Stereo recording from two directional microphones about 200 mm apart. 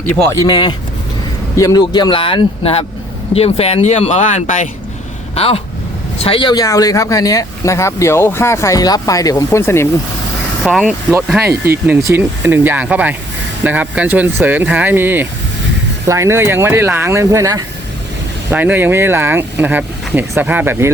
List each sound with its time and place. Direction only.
0.1 s speech: 10° left (ahead or behind)
10.6 s speech: centre (ahead or behind)
11.1 s speech: 10° right (ahead or behind)